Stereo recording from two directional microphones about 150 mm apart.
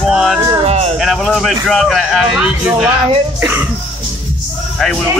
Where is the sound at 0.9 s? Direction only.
Centre (ahead or behind).